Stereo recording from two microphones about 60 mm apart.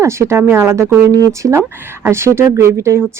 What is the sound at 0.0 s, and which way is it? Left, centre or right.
Speech, right.